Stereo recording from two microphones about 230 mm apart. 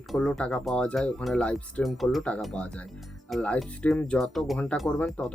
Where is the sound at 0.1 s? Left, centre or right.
Centre.